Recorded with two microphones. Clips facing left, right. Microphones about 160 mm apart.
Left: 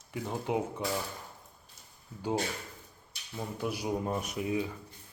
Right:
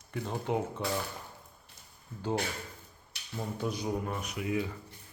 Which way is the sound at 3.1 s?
65° right (ahead or behind).